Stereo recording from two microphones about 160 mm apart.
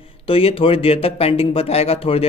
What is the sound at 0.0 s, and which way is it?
Speech, 35° left (ahead or behind).